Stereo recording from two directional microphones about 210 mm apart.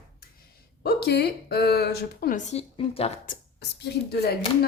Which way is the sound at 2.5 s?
30° left (ahead or behind).